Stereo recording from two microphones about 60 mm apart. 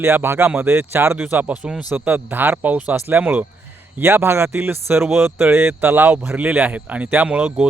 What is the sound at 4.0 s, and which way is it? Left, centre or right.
Speech, right.